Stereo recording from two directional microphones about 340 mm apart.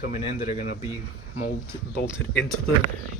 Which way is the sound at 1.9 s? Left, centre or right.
Left.